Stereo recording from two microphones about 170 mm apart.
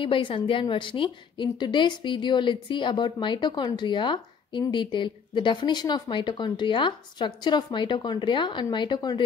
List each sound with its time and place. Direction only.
0.0 s a woman's voice: 30° left (ahead or behind)